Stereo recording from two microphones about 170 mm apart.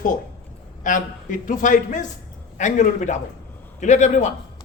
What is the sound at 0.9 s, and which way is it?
A man's voice, 50° left (ahead or behind).